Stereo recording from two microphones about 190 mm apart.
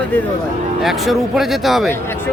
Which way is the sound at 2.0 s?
10° left (ahead or behind).